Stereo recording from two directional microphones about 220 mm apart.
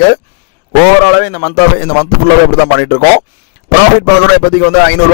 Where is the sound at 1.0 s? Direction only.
40° left (ahead or behind).